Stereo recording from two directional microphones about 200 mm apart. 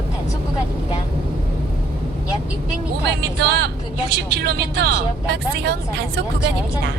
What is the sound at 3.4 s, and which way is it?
Speech, 55° right (ahead or behind).